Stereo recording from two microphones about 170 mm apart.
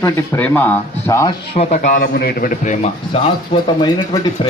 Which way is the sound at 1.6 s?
45° left (ahead or behind).